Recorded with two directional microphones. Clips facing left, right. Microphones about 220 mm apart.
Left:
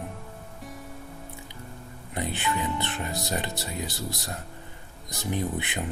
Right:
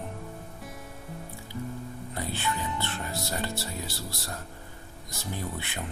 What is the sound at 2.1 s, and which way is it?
Speech, 20° left (ahead or behind).